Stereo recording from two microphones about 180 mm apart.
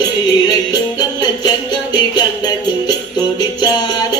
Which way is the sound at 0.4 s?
20° left (ahead or behind).